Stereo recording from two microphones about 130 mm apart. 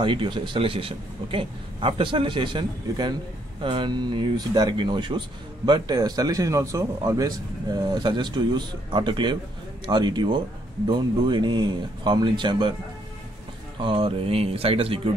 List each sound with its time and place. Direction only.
0.0 s speech: 40° right (ahead or behind)
13.8 s speech: 40° right (ahead or behind)